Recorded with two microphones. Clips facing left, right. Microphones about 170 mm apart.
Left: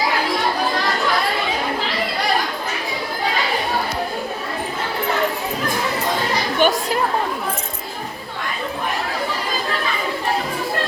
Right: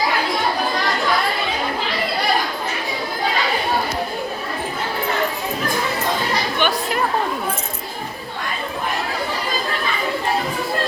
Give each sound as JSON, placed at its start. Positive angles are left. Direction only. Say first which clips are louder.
{"t": 6.6, "sound": "chatter", "louder": "left 6 dB", "side_deg": 40}